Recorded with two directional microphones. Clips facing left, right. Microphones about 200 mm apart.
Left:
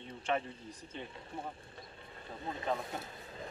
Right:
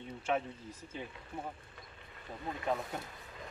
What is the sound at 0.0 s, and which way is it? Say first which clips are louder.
Speech: right 1 dB; 5° right (ahead or behind).